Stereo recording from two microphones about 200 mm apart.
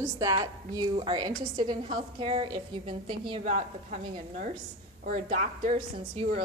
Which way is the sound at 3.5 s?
40° right (ahead or behind).